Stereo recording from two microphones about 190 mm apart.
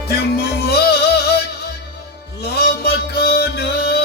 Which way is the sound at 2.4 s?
55° left (ahead or behind).